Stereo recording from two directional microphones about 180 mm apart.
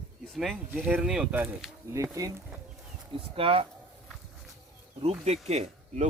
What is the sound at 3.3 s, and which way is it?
Speech, 30° right (ahead or behind).